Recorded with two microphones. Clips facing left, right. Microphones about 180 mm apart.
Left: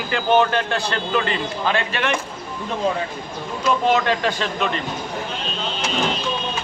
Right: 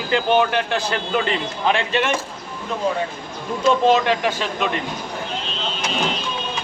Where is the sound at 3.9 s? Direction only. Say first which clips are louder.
Right 2 dB; 15° right (ahead or behind).